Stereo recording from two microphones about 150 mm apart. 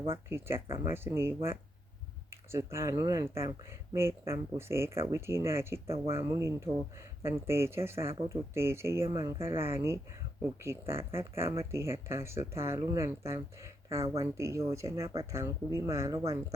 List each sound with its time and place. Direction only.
0.3 s speech: 15° right (ahead or behind)